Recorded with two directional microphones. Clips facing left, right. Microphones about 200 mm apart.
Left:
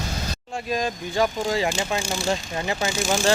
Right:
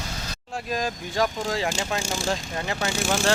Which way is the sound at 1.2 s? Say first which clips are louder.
Left 3 dB; 5° left (ahead or behind).